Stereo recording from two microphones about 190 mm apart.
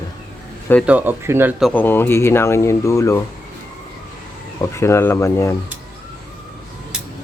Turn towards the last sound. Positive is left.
turn(degrees=15)  # may be behind; listen again after turning